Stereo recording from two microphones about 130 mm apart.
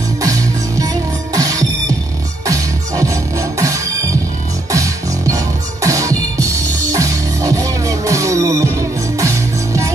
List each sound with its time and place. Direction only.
0.2 s music: 25° right (ahead or behind)